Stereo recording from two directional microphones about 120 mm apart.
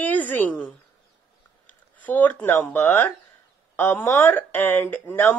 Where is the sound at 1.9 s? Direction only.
15° left (ahead or behind).